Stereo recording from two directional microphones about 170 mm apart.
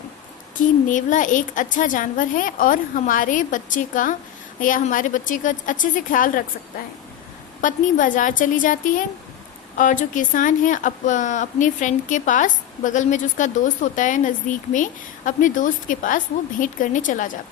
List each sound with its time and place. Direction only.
0.9 s speech: 50° left (ahead or behind)
7.6 s speech: 50° left (ahead or behind)